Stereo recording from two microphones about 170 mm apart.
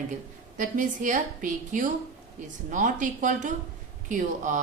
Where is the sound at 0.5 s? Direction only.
50° right (ahead or behind).